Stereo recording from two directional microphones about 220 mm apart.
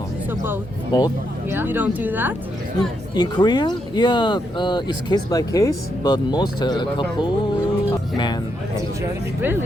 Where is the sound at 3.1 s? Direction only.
20° left (ahead or behind).